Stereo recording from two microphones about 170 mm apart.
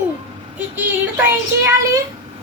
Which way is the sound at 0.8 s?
10° right (ahead or behind).